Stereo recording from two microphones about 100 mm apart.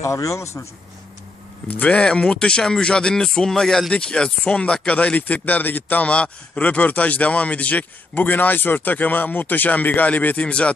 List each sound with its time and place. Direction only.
0.0 s speech: 30° left (ahead or behind)
1.7 s speech: 15° left (ahead or behind)